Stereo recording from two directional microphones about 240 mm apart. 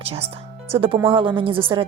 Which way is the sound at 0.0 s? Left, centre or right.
Right.